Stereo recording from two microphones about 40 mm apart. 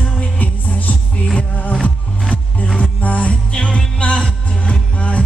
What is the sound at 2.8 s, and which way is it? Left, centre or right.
Music, left.